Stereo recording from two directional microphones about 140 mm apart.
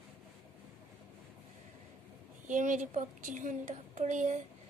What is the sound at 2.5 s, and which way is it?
A woman's voice, 65° right (ahead or behind).